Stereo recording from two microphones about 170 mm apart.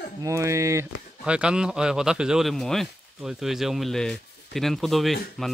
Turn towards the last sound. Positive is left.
turn(degrees=0)  # may be behind; listen again after turning